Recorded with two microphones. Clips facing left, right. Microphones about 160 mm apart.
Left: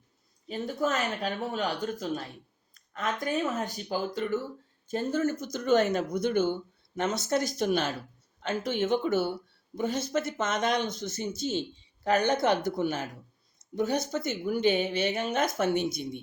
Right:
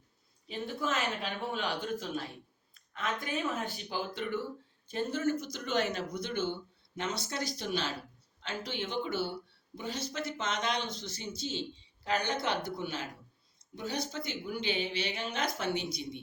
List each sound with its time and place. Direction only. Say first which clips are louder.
0.4 s speech: left 5 dB; 40° left (ahead or behind)